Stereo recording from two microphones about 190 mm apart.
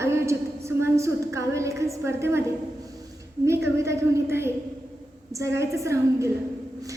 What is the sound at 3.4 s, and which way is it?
A woman's voice, 15° right (ahead or behind).